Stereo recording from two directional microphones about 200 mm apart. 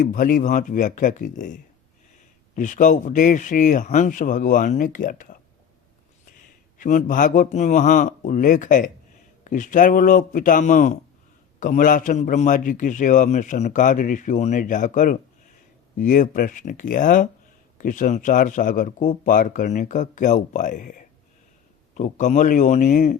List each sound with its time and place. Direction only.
0.0 s a man's voice: 45° left (ahead or behind)
2.6 s a man's voice: 40° left (ahead or behind)
6.7 s a man's voice: 40° left (ahead or behind)